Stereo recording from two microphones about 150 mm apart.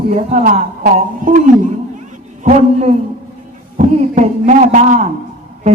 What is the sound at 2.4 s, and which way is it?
A woman's voice, 50° right (ahead or behind).